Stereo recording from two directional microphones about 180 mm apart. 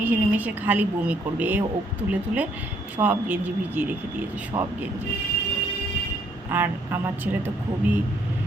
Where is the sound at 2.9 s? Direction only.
10° right (ahead or behind).